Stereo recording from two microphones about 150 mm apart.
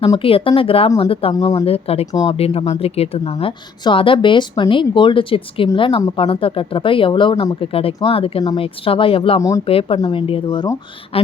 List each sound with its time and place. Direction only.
0.2 s a woman's voice: 35° left (ahead or behind)